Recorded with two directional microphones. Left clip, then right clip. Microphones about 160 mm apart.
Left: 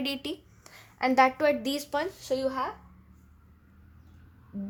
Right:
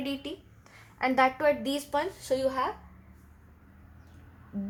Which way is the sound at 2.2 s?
15° left (ahead or behind).